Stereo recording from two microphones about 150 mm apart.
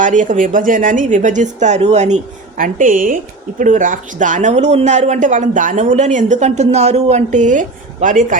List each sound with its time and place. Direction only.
0.0 s speech: 55° right (ahead or behind)